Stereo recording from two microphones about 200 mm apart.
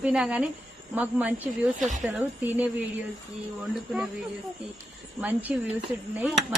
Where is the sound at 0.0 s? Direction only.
5° right (ahead or behind).